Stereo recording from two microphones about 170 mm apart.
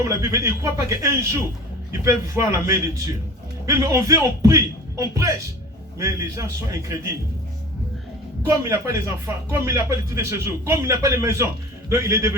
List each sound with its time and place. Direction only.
0.1 s speech: 15° right (ahead or behind)
8.4 s speech: 15° right (ahead or behind)